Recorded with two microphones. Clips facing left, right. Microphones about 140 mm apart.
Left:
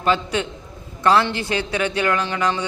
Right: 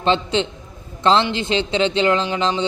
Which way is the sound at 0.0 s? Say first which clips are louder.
Right 2 dB; 25° right (ahead or behind).